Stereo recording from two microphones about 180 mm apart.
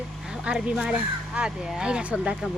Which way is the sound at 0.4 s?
5° right (ahead or behind).